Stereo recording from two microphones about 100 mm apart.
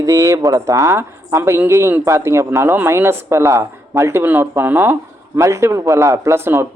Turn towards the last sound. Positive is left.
turn(degrees=-25)  # may be behind; listen again after turning